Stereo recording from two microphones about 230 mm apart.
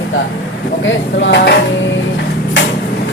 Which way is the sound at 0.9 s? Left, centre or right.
Left.